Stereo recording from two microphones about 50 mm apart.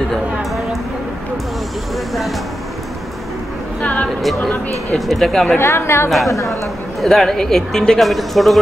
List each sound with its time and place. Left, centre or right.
3.8 s a sound: left
4.9 s speech: centre
5.6 s a woman's voice: left
6.0 s speech: centre